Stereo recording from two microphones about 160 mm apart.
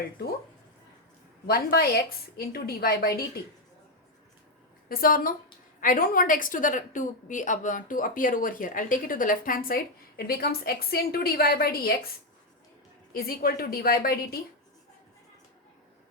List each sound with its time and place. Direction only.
1.5 s a woman's voice: 70° left (ahead or behind)
4.9 s a woman's voice: 65° left (ahead or behind)
13.1 s a woman's voice: 70° left (ahead or behind)